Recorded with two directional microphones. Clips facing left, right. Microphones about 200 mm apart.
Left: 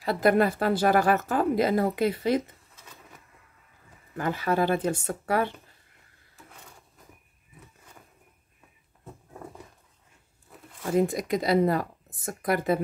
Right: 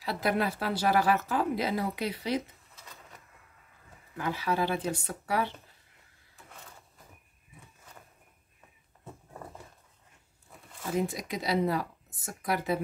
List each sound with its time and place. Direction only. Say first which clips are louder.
0.0 s speech: left 7 dB; 50° left (ahead or behind)
4.2 s speech: left 4 dB; 50° left (ahead or behind)
11.0 s speech: left 7 dB; 50° left (ahead or behind)